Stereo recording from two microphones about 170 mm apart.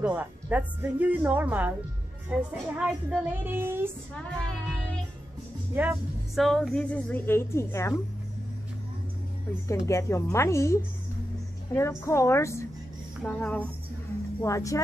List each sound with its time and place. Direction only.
0.1 s a woman's voice: 10° right (ahead or behind)
4.1 s a woman's voice: 5° left (ahead or behind)
5.8 s a woman's voice: 5° right (ahead or behind); by 8.0 s 15° left (ahead or behind)
9.8 s a woman's voice: 15° left (ahead or behind)
12.0 s a woman's voice: 15° left (ahead or behind)
14.4 s speech: 20° left (ahead or behind)